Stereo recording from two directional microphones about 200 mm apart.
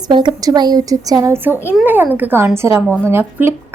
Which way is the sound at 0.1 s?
20° right (ahead or behind).